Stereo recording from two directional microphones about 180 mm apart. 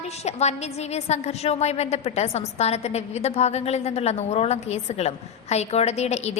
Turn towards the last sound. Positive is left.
turn(degrees=40)  # may be behind; listen again after turning